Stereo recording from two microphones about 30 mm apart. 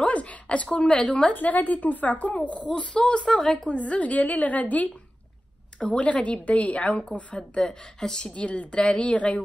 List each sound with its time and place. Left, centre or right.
0.0 s a sound: left
0.7 s speech: left
1.3 s a woman's voice: left
2.8 s speech: left
3.6 s a woman's voice: left
5.9 s a woman's voice: left
7.6 s speech: centre
8.3 s a woman's voice: left